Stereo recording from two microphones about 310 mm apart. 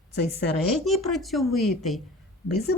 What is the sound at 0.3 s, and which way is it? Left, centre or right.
Speech, left.